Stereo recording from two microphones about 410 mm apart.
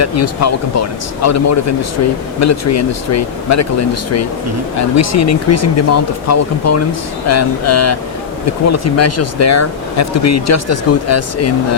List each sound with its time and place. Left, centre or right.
0.0 s speech: left